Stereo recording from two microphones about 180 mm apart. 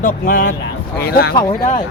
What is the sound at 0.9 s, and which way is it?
Speech, 60° left (ahead or behind).